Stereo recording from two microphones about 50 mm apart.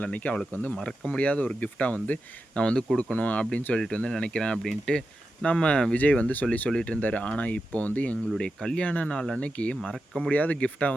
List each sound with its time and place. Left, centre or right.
0.0 s speech: left
3.8 s speech: centre
6.7 s speech: centre
8.4 s speech: centre